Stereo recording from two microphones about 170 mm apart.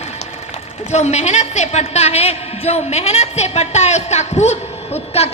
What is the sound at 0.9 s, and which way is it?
A woman's voice, 40° left (ahead or behind).